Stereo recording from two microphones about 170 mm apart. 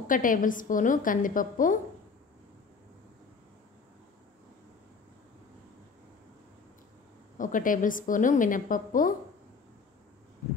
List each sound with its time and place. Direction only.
0.1 s a woman's voice: 50° left (ahead or behind)
7.3 s a woman's voice: 50° left (ahead or behind)